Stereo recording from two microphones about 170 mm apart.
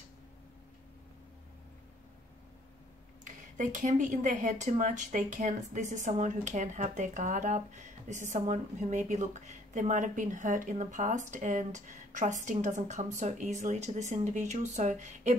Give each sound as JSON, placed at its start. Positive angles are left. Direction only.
{"t": 3.5, "sound": "speech", "side_deg": -50}